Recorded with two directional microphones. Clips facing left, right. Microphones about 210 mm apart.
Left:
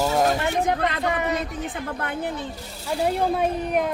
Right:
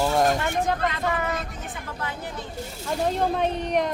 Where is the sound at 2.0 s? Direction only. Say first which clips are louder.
Left 4 dB; 60° left (ahead or behind).